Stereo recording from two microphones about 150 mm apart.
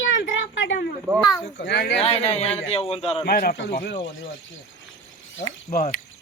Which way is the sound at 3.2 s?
85° left.